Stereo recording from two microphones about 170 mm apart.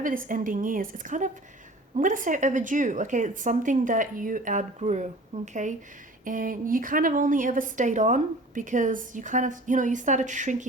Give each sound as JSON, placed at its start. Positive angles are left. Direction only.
{"t": 0.0, "sound": "a woman's voice", "side_deg": -55}